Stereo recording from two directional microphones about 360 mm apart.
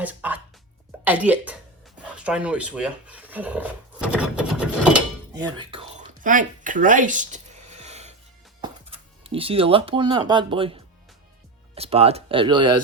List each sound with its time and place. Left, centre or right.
0.0 s a woman's voice: centre